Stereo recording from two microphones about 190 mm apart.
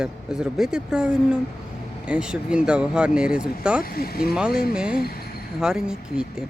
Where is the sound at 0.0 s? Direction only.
5° right (ahead or behind).